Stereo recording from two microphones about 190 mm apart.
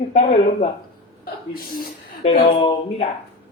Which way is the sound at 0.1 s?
30° left (ahead or behind).